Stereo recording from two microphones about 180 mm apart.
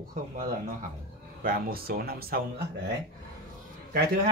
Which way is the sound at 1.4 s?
55° right (ahead or behind).